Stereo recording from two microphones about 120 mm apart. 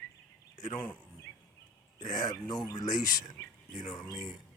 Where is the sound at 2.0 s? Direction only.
90° left.